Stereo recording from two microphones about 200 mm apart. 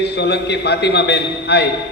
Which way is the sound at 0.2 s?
60° left (ahead or behind).